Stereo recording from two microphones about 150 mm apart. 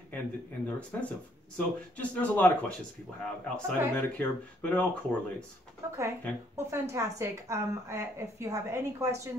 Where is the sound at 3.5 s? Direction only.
10° left (ahead or behind).